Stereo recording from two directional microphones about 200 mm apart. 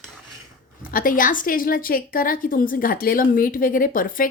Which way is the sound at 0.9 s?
45° left (ahead or behind).